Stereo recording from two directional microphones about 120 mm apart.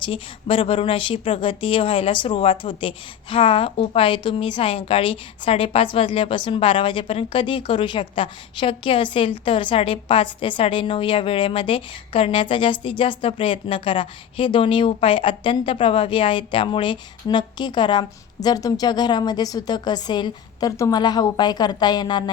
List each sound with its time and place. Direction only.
0.0 s speech: 45° left (ahead or behind)